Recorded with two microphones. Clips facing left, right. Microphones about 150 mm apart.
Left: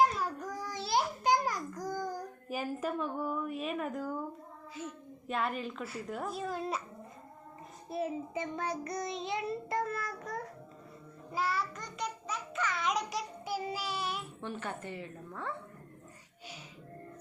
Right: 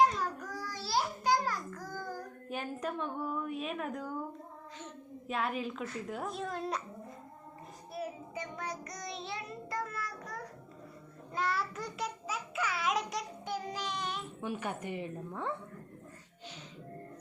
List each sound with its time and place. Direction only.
0.5 s a sound: 20° left (ahead or behind)
2.5 s a woman's voice: 5° left (ahead or behind)
5.3 s a woman's voice: centre (ahead or behind)
7.9 s child singing: 25° left (ahead or behind)
11.3 s a child's voice: centre (ahead or behind)
14.4 s a woman's voice: 10° right (ahead or behind)